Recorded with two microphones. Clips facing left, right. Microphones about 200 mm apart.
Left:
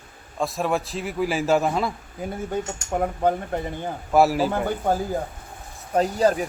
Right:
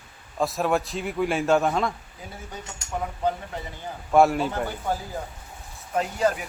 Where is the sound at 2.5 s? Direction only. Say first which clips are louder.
Left 6 dB; 50° left (ahead or behind).